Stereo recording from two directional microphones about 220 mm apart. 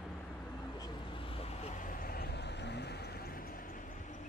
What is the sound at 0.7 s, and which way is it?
Vehicle, 20° left (ahead or behind).